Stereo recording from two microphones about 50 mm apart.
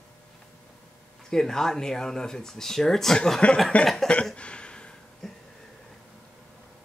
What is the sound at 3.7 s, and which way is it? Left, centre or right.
Cough, left.